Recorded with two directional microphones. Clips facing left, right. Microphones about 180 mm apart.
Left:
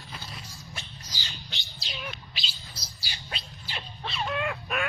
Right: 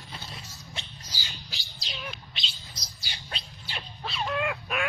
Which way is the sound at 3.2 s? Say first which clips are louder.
Left 1 dB; 5° left (ahead or behind).